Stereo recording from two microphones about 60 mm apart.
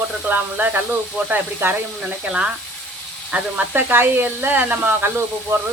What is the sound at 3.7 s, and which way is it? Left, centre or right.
Speech, right.